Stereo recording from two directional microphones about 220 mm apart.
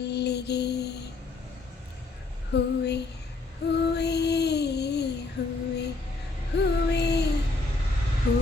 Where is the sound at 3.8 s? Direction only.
50° left (ahead or behind).